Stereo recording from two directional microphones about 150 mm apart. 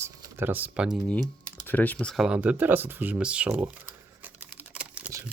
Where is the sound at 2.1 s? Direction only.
5° right (ahead or behind).